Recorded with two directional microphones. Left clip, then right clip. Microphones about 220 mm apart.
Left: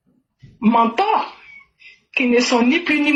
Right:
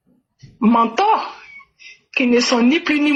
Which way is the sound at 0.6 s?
50° right (ahead or behind).